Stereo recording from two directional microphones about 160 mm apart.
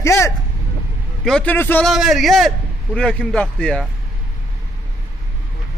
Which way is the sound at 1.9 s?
Centre (ahead or behind).